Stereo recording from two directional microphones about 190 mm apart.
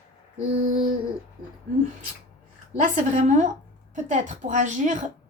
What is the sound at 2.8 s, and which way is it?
A woman's voice, 40° right (ahead or behind).